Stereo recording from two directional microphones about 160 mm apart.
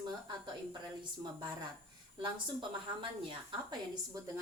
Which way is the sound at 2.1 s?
30° right (ahead or behind).